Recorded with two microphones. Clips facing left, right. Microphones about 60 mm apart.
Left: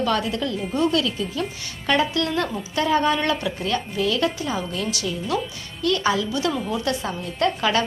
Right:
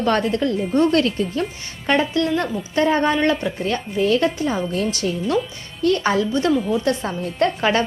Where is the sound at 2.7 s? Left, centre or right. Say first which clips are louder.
Right 3 dB; right.